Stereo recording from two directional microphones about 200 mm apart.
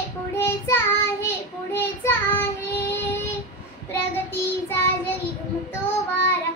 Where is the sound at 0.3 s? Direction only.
10° left (ahead or behind).